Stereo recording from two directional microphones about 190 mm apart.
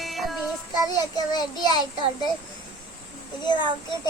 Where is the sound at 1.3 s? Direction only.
20° left (ahead or behind).